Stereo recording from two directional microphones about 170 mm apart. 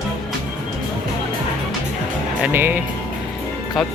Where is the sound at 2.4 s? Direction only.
15° right (ahead or behind).